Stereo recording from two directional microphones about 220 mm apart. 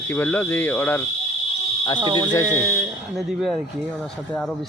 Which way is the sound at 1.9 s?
20° right (ahead or behind).